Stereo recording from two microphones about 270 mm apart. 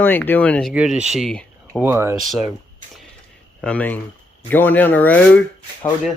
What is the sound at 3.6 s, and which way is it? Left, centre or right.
Speech, centre.